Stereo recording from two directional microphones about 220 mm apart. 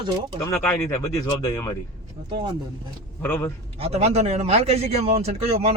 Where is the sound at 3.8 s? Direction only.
30° right (ahead or behind).